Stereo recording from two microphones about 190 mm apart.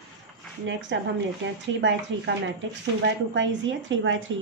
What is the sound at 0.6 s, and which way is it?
A woman's voice, 75° right (ahead or behind).